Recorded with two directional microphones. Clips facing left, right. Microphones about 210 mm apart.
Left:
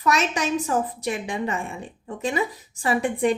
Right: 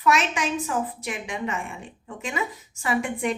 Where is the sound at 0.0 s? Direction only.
40° left (ahead or behind).